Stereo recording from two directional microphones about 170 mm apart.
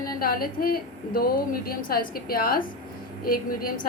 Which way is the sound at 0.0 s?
60° left (ahead or behind).